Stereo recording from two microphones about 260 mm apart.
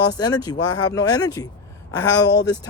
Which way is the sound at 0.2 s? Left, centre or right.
Centre.